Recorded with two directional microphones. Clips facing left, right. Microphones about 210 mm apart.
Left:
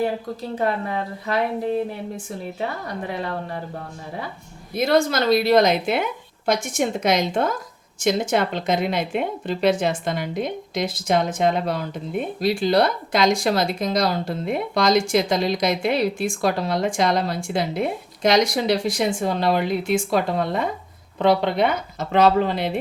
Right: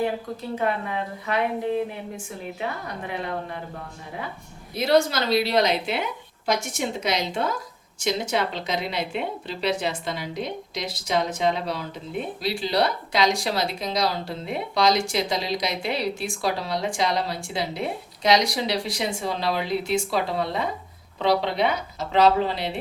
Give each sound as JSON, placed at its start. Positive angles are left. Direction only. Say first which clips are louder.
{"t": 0.6, "sound": "a woman's voice", "louder": "left 3 dB", "side_deg": 35}
{"t": 4.7, "sound": "speech", "louder": "left 1 dB", "side_deg": 50}